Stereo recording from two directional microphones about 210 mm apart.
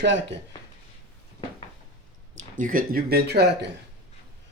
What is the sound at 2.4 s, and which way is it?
Speech, 40° right (ahead or behind).